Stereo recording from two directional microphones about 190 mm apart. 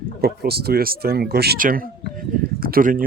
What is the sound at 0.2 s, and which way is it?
Speech, 55° right (ahead or behind).